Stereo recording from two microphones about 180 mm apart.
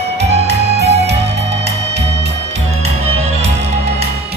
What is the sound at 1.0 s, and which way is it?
Music, 70° right (ahead or behind).